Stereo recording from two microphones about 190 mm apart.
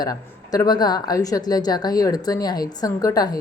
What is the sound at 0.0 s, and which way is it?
A woman's voice, 20° left (ahead or behind).